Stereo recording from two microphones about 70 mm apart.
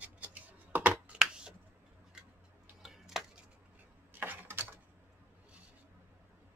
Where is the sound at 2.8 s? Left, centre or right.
Centre.